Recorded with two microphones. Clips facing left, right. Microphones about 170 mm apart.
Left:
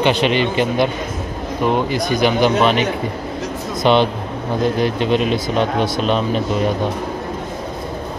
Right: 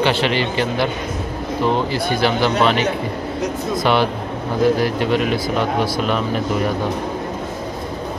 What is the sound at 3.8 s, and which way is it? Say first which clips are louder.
Speech: left 4 dB; 20° left (ahead or behind).